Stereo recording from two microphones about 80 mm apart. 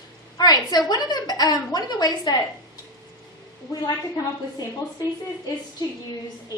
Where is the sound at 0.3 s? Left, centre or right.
Left.